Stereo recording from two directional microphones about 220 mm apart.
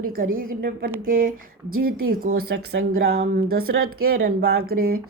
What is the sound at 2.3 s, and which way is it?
Speech, 65° right (ahead or behind).